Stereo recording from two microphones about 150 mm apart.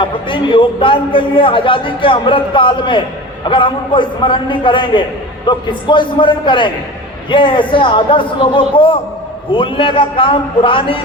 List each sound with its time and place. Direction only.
0.0 s a man's voice: 35° left (ahead or behind)